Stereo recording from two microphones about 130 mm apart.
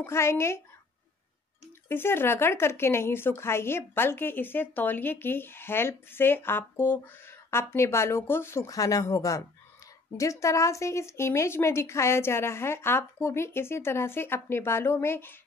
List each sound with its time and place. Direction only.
0.0 s speech: 20° left (ahead or behind)
1.9 s speech: 15° left (ahead or behind)